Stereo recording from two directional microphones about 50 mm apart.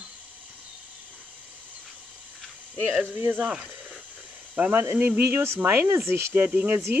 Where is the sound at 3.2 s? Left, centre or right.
Right.